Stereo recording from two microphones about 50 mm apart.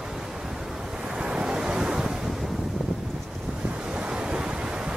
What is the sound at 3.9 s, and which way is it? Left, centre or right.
Waves, centre.